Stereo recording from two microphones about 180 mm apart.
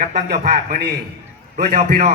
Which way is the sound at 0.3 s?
55° right (ahead or behind).